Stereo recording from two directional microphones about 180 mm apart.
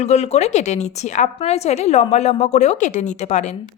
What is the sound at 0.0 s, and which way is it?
A woman's voice, 40° left (ahead or behind).